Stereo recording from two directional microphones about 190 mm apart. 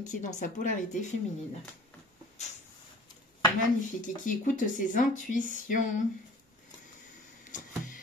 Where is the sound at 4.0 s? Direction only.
45° left (ahead or behind).